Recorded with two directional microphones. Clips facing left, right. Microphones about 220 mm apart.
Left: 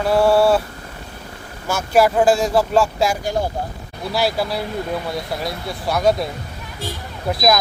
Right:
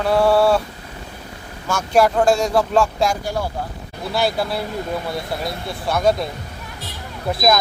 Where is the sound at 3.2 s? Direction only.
20° left (ahead or behind).